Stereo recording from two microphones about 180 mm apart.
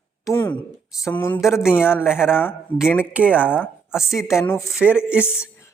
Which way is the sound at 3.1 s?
5° right (ahead or behind).